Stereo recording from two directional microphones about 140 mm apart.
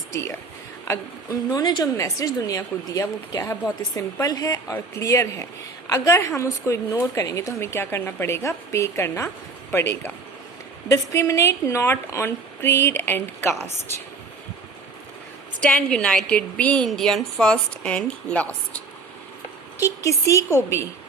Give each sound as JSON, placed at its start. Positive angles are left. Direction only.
{"t": 0.1, "sound": "a woman's voice", "side_deg": 20}
{"t": 15.6, "sound": "a woman's voice", "side_deg": 10}
{"t": 19.8, "sound": "a woman's voice", "side_deg": 20}